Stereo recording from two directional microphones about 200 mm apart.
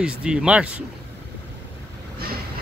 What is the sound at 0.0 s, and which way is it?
Speech, 5° right (ahead or behind).